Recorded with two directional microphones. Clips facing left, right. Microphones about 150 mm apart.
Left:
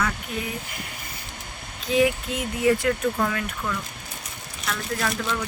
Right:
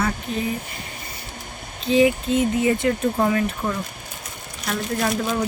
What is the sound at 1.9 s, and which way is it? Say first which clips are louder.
Speech: right 4 dB; 25° right (ahead or behind).